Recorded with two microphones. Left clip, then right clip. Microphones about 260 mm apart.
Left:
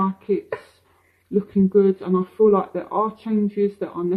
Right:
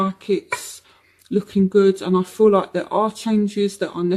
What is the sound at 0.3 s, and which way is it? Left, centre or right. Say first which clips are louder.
Speech: right 2 dB; right.